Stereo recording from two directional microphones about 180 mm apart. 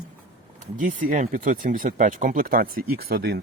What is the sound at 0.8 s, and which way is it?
Speech, 45° right (ahead or behind).